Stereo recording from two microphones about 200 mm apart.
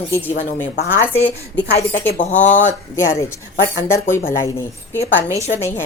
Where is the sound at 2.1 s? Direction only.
40° left (ahead or behind).